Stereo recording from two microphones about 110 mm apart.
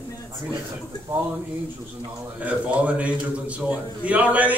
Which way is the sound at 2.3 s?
10° right (ahead or behind).